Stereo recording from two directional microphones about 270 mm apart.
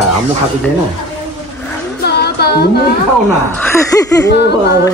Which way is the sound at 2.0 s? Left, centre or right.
Left.